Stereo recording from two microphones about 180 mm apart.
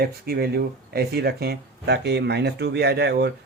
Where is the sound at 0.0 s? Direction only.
60° right (ahead or behind).